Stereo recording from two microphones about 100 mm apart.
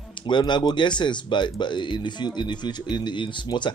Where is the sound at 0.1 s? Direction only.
50° left (ahead or behind).